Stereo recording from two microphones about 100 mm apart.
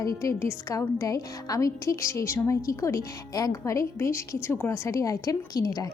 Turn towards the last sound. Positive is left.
turn(degrees=35)  # may be behind; listen again after turning